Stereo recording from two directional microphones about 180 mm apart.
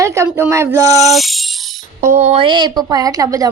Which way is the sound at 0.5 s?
15° right (ahead or behind).